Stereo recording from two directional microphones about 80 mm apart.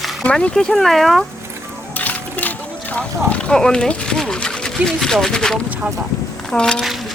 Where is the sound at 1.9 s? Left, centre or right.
Left.